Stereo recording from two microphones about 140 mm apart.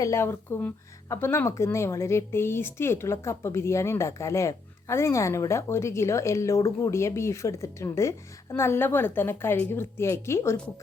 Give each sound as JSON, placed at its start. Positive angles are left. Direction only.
{"t": 0.0, "sound": "speech", "side_deg": 20}